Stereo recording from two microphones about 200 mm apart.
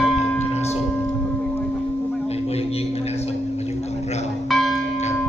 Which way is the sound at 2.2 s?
30° left (ahead or behind).